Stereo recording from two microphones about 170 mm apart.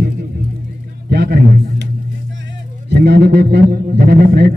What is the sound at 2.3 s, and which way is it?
Speech, 85° right.